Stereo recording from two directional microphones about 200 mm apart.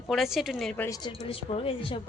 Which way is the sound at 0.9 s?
25° left (ahead or behind).